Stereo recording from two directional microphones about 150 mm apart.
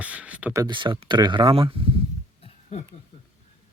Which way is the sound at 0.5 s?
25° right (ahead or behind).